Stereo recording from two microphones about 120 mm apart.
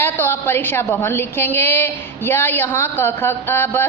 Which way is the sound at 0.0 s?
20° left (ahead or behind).